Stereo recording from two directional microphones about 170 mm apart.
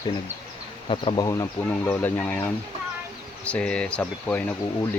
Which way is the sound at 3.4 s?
5° left (ahead or behind).